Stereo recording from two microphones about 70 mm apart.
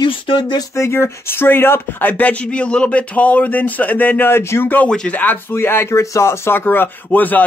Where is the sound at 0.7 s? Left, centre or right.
Left.